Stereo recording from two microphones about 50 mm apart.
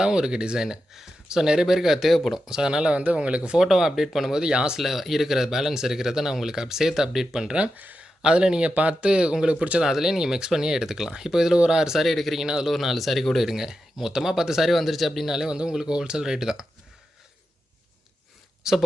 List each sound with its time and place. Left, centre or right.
0.0 s speech: centre
2.5 s speech: centre
3.6 s speech: centre
4.8 s speech: centre
7.8 s speech: right
8.2 s speech: centre
9.9 s speech: centre
12.0 s speech: centre
12.5 s speech: centre
12.7 s speech: centre
18.6 s speech: centre